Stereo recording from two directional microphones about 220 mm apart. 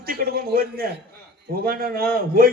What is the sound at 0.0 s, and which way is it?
A man's voice, 45° right (ahead or behind).